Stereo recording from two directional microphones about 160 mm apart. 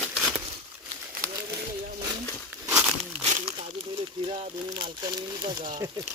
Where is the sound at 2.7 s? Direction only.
10° right (ahead or behind).